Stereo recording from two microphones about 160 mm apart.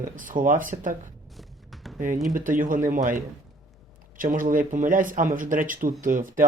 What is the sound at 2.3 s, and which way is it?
Speech, 55° right (ahead or behind).